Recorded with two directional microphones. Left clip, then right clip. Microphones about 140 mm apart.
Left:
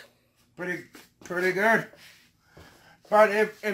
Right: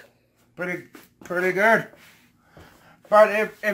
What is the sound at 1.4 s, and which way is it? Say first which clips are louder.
Speech: right 4 dB; centre (ahead or behind).